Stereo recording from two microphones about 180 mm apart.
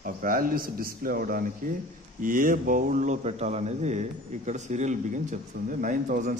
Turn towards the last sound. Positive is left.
turn(degrees=-50)  # may be behind; listen again after turning